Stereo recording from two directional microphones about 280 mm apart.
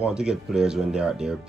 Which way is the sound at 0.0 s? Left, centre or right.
Centre.